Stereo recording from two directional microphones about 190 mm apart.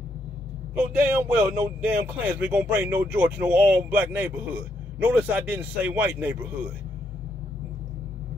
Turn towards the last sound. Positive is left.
turn(degrees=-10)  # may be behind; listen again after turning